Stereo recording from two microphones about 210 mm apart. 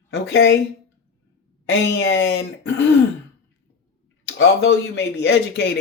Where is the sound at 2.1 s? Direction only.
60° left (ahead or behind).